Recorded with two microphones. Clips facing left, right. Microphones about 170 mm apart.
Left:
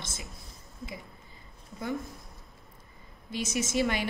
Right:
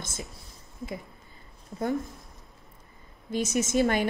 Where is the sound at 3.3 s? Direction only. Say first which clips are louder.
Right 5 dB; 45° right (ahead or behind).